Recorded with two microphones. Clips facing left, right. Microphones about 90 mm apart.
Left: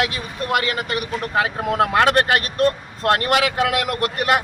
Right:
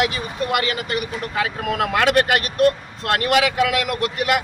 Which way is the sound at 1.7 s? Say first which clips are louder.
Left 2 dB; 30° left (ahead or behind).